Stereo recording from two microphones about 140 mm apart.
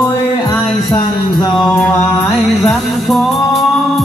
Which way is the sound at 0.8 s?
30° left (ahead or behind).